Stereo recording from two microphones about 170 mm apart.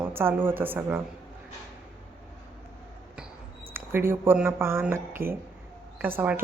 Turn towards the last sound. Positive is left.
turn(degrees=-10)  # may be behind; listen again after turning